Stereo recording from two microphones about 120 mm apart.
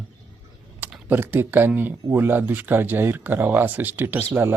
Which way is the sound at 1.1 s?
15° right (ahead or behind).